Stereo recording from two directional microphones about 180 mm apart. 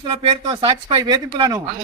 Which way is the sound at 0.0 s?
30° right (ahead or behind).